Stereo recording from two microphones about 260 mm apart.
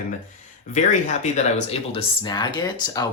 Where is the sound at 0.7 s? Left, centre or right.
Left.